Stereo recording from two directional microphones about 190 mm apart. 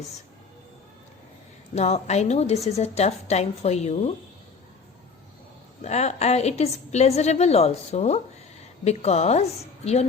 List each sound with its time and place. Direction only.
1.7 s a woman's voice: 35° left (ahead or behind)
5.8 s a woman's voice: 35° left (ahead or behind)